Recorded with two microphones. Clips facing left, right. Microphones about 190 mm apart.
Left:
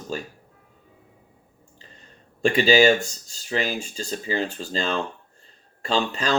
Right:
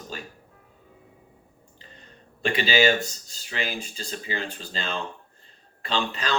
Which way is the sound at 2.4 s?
45° left (ahead or behind).